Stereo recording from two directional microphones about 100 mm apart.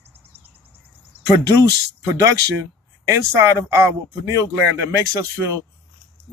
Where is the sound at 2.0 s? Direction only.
30° right (ahead or behind).